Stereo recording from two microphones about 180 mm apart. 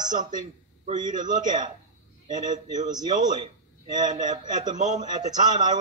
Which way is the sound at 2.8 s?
20° right (ahead or behind).